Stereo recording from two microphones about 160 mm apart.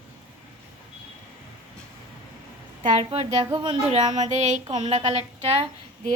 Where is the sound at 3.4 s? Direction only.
25° right (ahead or behind).